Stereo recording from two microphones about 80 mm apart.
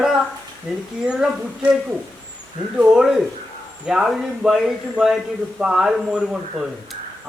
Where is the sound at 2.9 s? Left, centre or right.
Centre.